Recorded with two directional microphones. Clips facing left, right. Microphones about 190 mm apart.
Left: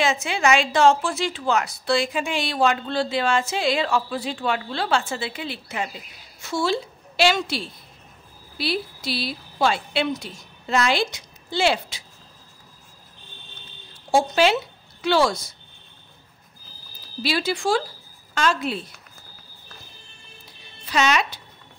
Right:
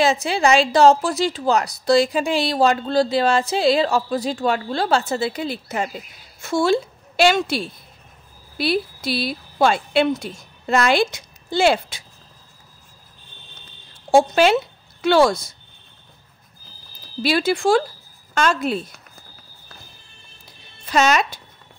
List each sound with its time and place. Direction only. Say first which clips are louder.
0.0 s a woman's voice: right 4 dB; 35° right (ahead or behind)
6.4 s a woman's voice: right 6 dB; 55° right (ahead or behind)
14.1 s a woman's voice: right 4 dB; 50° right (ahead or behind)
17.2 s speech: right 5 dB; 50° right (ahead or behind)
20.8 s speech: right 4 dB; 45° right (ahead or behind)